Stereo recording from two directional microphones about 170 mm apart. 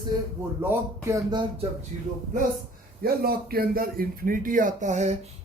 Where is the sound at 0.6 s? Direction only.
20° right (ahead or behind).